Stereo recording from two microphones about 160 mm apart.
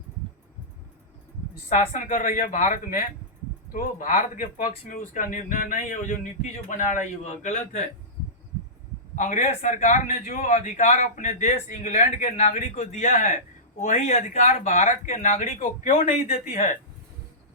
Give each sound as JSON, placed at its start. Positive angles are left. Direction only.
{"t": 1.9, "sound": "a man's voice", "side_deg": 55}
{"t": 9.1, "sound": "a man's voice", "side_deg": 50}